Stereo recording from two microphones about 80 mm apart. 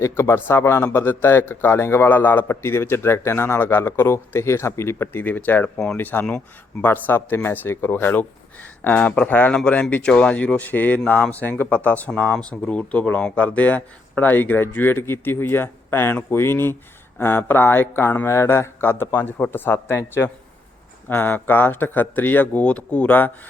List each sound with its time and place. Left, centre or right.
0.0 s a man's voice: left